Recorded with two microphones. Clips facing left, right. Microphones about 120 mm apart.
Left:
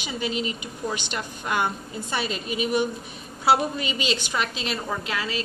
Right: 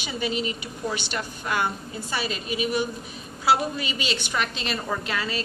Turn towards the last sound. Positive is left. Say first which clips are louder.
# right 1 dB
turn(degrees=5)  # may be behind; listen again after turning